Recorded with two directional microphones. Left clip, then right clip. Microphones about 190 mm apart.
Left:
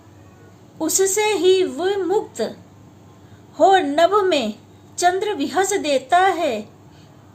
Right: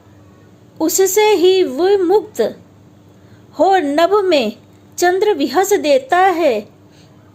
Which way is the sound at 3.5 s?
40° right (ahead or behind).